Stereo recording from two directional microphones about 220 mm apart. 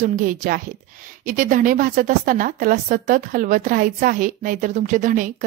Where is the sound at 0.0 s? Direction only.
35° right (ahead or behind).